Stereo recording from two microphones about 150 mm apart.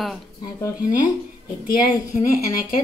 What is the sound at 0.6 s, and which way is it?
Speech, 20° left (ahead or behind).